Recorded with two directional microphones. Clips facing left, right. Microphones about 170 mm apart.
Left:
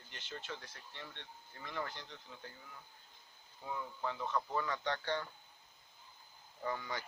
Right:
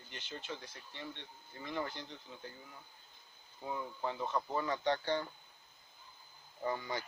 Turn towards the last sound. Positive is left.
turn(degrees=-30)  # may be behind; listen again after turning